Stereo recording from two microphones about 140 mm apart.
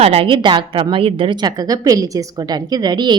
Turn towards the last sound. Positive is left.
turn(degrees=-30)  # may be behind; listen again after turning